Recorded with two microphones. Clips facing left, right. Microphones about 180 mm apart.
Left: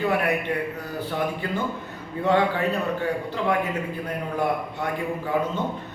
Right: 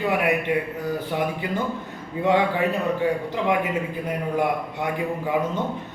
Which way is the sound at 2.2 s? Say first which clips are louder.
Right 1 dB; 15° right (ahead or behind).